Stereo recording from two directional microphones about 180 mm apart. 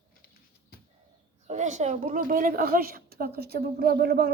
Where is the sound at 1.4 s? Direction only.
40° right (ahead or behind).